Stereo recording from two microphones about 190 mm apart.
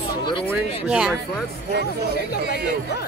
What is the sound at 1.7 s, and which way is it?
Speech, 60° right (ahead or behind).